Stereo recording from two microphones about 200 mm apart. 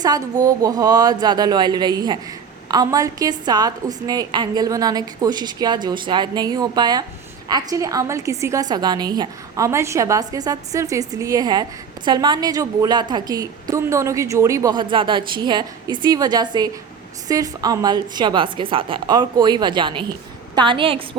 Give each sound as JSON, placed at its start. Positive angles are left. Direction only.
{"t": 0.0, "sound": "a woman's voice", "side_deg": -20}